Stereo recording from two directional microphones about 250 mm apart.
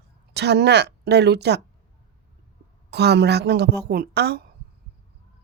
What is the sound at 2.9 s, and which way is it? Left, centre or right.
Speech, right.